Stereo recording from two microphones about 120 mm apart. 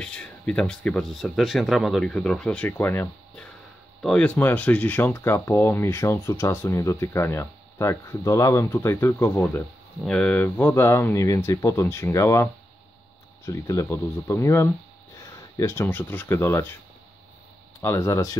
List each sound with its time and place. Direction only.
0.0 s speech: 10° left (ahead or behind)
10.0 s speech: 5° left (ahead or behind); by 12.4 s 25° left (ahead or behind)
13.5 s speech: 25° left (ahead or behind)
17.8 s speech: 25° left (ahead or behind)